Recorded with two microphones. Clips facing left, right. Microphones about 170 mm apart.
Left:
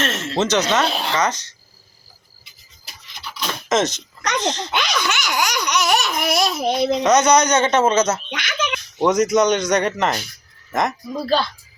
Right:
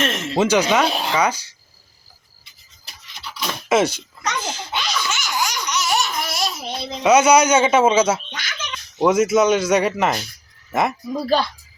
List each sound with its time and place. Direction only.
0.0 s speech: 15° right (ahead or behind)
3.4 s speech: 10° right (ahead or behind)
4.7 s laughter: 75° left (ahead or behind)
7.0 s speech: 10° right (ahead or behind)
8.3 s speech: 80° left
9.0 s speech: 5° right (ahead or behind)